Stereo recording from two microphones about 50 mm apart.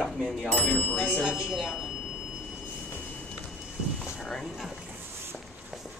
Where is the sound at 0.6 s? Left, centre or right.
Left.